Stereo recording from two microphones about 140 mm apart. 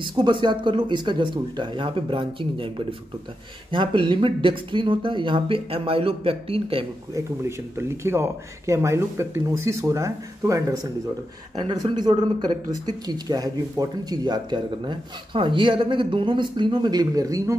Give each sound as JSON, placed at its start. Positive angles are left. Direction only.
{"t": 0.0, "sound": "speech", "side_deg": -35}
{"t": 7.2, "sound": "speech", "side_deg": -20}